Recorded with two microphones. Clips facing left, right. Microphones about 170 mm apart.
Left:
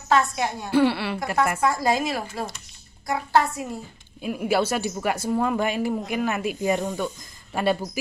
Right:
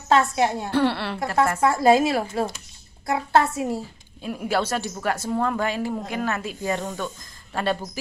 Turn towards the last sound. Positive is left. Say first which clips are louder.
# left 2 dB
turn(degrees=10)  # may be behind; listen again after turning